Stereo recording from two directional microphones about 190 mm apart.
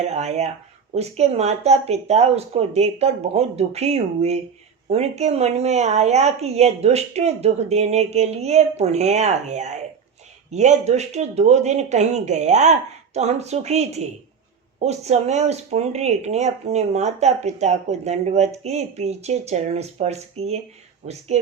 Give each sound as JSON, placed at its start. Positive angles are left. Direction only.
{"t": 0.0, "sound": "speech", "side_deg": -35}